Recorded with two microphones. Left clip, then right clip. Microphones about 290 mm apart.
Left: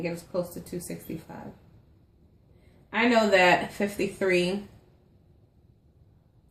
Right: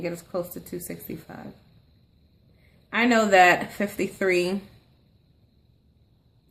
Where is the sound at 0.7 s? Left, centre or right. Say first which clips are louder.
Right 2 dB; right.